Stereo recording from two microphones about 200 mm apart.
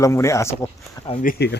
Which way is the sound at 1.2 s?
55° left (ahead or behind).